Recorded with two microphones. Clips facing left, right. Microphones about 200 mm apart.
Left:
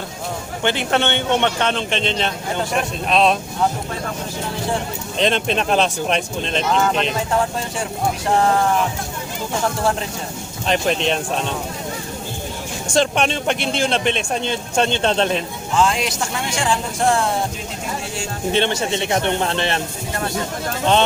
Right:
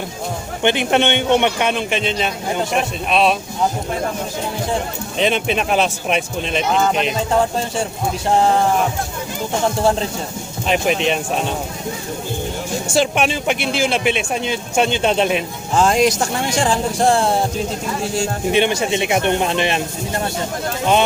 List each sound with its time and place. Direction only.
0.6 s a man's voice: 20° right (ahead or behind)
5.1 s speech: 5° right (ahead or behind)
10.7 s a man's voice: 5° right (ahead or behind)
12.9 s a man's voice: 5° right (ahead or behind)
15.7 s speech: 40° right (ahead or behind)
18.5 s a man's voice: 10° right (ahead or behind)